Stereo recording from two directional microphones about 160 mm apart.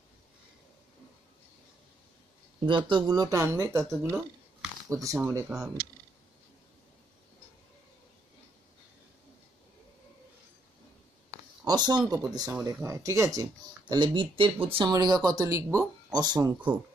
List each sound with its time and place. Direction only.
2.6 s speech: 30° right (ahead or behind)
11.6 s speech: 25° right (ahead or behind)